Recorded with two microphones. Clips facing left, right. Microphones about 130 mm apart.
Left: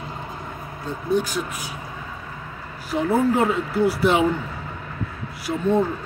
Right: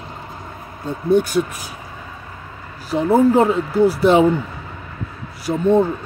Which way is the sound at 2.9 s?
30° right (ahead or behind).